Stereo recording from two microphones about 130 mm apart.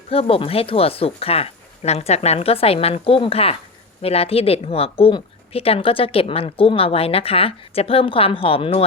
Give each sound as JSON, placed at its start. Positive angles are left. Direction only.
{"t": 0.1, "sound": "speech", "side_deg": 45}